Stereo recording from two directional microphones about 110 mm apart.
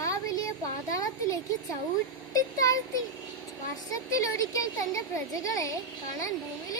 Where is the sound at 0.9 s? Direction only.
30° left (ahead or behind).